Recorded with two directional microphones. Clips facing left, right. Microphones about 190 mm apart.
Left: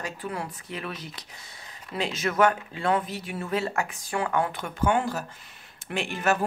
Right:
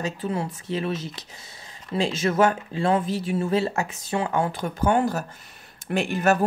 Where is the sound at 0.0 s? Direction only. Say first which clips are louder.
Right 6 dB; 25° right (ahead or behind).